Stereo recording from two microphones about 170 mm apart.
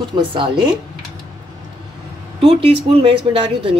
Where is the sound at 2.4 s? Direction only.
35° right (ahead or behind).